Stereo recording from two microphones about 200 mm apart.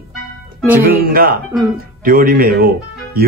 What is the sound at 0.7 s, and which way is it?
Speech, 45° right (ahead or behind).